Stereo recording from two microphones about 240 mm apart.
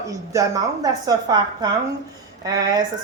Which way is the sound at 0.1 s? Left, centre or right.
Centre.